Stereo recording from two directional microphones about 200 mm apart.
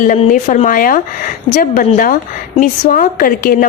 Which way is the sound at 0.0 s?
40° left (ahead or behind).